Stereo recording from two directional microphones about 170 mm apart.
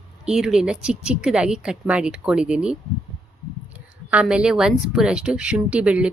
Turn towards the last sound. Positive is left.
turn(degrees=-5)  # may be behind; listen again after turning